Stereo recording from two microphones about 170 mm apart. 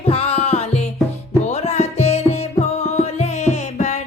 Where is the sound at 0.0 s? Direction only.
35° left (ahead or behind).